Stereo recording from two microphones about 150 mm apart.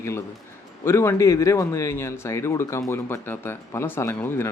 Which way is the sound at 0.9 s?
20° left (ahead or behind).